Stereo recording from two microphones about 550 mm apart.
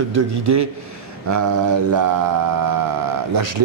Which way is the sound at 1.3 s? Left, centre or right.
Right.